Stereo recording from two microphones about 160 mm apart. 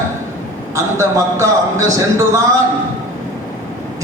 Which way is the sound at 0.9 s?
20° right (ahead or behind).